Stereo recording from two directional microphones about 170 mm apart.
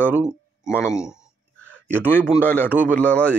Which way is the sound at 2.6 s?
10° right (ahead or behind).